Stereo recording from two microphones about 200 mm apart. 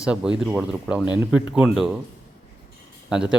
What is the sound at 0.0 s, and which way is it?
A man's voice, 5° right (ahead or behind).